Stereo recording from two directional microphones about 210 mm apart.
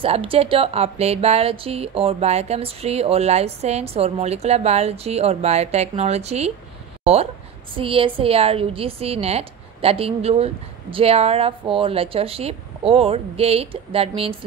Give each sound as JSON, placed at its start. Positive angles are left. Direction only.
{"t": 0.0, "sound": "a woman's voice", "side_deg": -25}
{"t": 7.7, "sound": "a woman's voice", "side_deg": -25}